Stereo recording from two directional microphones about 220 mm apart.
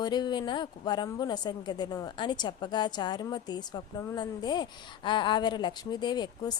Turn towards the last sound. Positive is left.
turn(degrees=20)  # may be behind; listen again after turning